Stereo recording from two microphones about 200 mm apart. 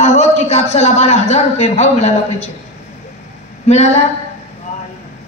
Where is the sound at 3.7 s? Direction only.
30° left (ahead or behind).